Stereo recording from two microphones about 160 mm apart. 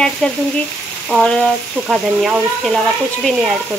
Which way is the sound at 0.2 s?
5° left (ahead or behind).